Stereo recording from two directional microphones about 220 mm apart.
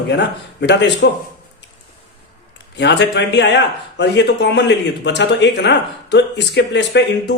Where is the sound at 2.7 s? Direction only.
50° left (ahead or behind).